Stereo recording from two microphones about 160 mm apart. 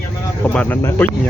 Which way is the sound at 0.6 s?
10° left (ahead or behind).